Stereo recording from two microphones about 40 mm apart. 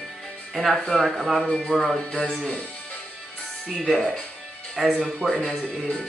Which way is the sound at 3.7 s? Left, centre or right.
Centre.